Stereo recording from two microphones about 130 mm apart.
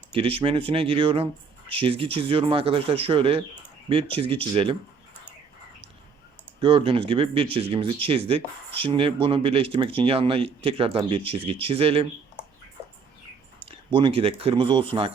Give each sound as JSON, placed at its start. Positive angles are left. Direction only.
{"t": 0.1, "sound": "speech", "side_deg": -45}
{"t": 6.6, "sound": "speech", "side_deg": -45}
{"t": 13.7, "sound": "speech", "side_deg": -45}